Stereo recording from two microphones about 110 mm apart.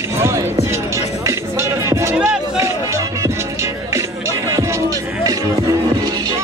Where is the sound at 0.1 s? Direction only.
25° right (ahead or behind).